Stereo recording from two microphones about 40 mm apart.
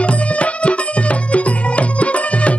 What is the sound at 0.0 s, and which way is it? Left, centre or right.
Music, left.